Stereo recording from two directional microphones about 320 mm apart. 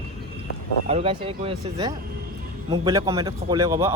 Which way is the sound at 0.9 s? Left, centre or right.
Centre.